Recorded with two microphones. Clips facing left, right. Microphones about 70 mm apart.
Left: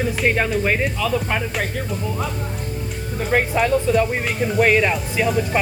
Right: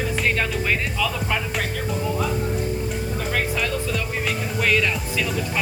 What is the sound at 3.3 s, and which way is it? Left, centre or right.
Speech, left.